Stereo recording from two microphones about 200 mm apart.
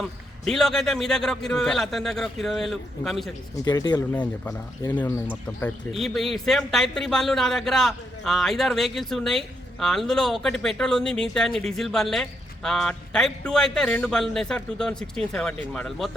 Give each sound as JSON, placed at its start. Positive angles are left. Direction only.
{"t": 0.0, "sound": "speech", "side_deg": 0}
{"t": 3.5, "sound": "speech", "side_deg": 15}
{"t": 4.1, "sound": "speech", "side_deg": 10}
{"t": 5.9, "sound": "speech", "side_deg": 0}